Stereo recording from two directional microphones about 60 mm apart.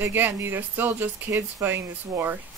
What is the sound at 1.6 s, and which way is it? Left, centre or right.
Speech, right.